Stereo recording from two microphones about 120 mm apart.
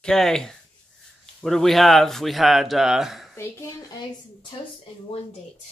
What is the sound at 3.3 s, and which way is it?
Speech, 20° left (ahead or behind).